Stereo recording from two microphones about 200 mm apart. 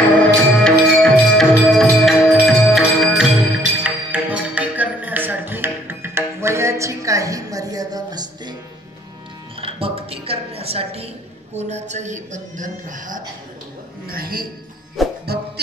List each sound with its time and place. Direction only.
0.0 s music: 5° left (ahead or behind); by 8.5 s 20° right (ahead or behind)
9.6 s music: 30° right (ahead or behind)
11.5 s a woman's voice: 35° right (ahead or behind)
15.0 s music: centre (ahead or behind)